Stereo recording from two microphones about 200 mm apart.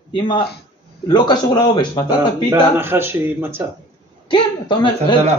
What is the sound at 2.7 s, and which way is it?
Speech, 10° right (ahead or behind).